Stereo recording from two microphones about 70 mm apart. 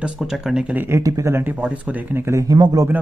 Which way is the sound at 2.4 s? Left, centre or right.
Right.